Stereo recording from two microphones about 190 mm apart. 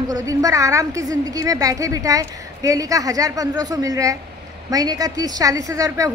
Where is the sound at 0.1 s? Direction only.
20° right (ahead or behind).